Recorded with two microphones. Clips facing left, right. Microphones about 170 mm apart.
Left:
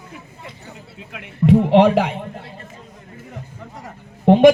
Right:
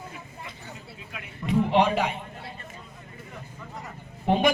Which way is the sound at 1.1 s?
75° left (ahead or behind).